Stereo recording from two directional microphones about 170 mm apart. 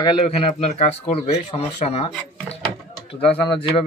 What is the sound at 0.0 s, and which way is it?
A man's voice, 30° left (ahead or behind).